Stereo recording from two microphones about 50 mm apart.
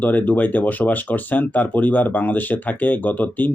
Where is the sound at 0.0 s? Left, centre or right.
Left.